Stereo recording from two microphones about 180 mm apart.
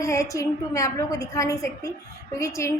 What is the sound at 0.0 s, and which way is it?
Speech, 15° left (ahead or behind).